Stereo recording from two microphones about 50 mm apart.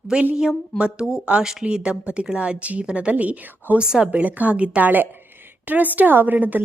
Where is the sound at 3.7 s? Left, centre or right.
Centre.